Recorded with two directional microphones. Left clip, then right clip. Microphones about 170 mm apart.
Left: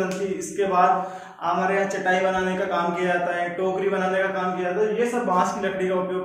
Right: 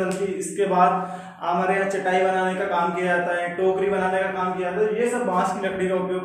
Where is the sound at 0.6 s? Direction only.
15° right (ahead or behind); by 3.4 s centre (ahead or behind).